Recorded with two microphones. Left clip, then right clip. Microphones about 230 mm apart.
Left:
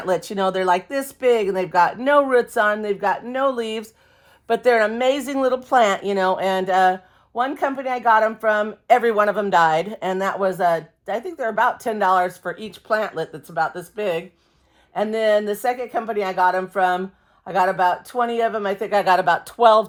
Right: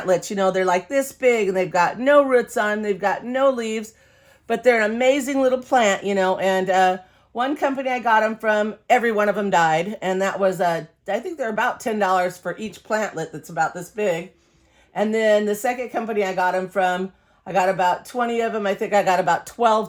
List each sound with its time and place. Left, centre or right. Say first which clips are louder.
0.0 s speech: right 1 dB; centre
16.2 s speech: left 3 dB; left